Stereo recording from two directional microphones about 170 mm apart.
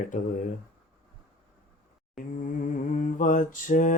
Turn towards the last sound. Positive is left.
turn(degrees=50)  # may be behind; listen again after turning